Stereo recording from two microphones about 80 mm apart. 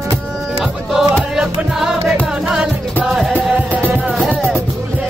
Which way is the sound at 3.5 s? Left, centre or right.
Centre.